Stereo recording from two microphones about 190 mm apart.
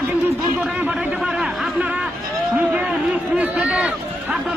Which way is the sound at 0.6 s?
5° right (ahead or behind).